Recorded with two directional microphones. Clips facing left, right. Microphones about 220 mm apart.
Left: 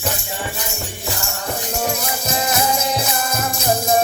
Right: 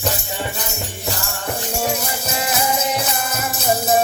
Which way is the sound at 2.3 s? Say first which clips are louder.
Left 2 dB; 5° right (ahead or behind).